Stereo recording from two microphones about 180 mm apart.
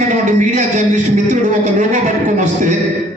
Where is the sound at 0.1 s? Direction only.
45° right (ahead or behind).